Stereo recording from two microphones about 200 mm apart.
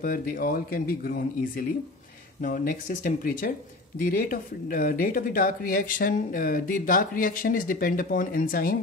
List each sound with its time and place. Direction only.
0.0 s speech: 45° left (ahead or behind)